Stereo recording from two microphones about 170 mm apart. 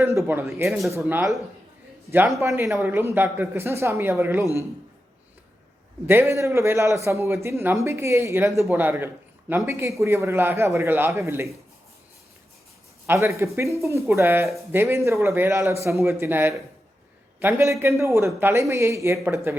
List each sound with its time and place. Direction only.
0.3 s a man's voice: 15° right (ahead or behind)
2.6 s speech: centre (ahead or behind)
2.9 s a man's voice: 15° right (ahead or behind)
6.1 s a man's voice: 15° right (ahead or behind)
13.1 s a man's voice: 15° right (ahead or behind)